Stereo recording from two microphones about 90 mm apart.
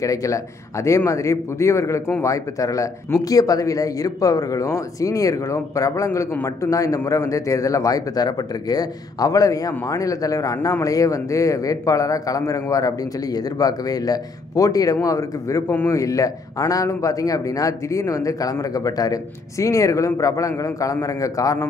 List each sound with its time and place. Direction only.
0.0 s speech: 40° left (ahead or behind)